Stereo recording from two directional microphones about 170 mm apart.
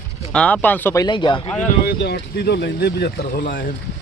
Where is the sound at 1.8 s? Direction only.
75° left (ahead or behind); by 3.6 s 55° left (ahead or behind).